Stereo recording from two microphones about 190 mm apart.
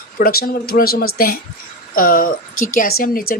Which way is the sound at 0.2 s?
50° left (ahead or behind).